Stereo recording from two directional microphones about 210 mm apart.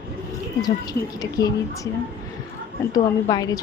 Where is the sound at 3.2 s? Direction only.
20° left (ahead or behind).